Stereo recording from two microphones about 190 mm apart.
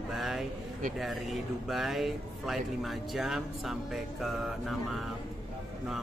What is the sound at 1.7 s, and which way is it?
Speech, centre (ahead or behind).